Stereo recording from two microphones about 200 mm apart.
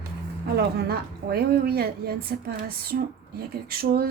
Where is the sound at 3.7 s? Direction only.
50° right (ahead or behind).